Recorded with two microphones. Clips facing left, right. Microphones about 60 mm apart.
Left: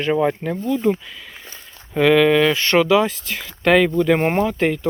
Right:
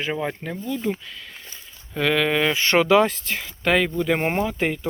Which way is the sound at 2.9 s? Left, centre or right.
Right.